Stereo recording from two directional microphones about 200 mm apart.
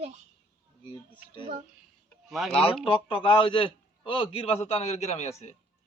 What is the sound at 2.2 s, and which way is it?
Speech, centre (ahead or behind).